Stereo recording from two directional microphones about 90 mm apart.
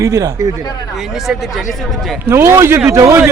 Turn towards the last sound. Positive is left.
turn(degrees=-40)  # may be behind; listen again after turning